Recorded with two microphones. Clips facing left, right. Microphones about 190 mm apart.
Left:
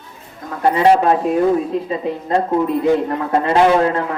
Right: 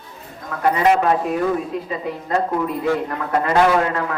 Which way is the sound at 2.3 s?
25° left (ahead or behind).